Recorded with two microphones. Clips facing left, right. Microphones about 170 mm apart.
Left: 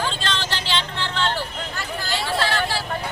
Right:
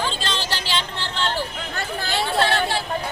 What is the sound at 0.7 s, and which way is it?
Vehicle, 40° right (ahead or behind).